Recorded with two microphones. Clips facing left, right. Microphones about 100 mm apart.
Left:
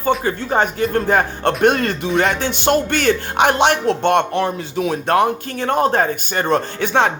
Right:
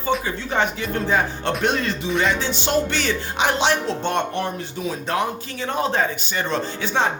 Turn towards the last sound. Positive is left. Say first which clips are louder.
# left 5 dB
turn(degrees=60)  # may be behind; listen again after turning